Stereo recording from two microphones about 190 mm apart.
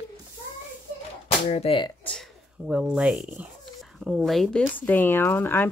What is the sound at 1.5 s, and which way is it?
Speech, 30° left (ahead or behind).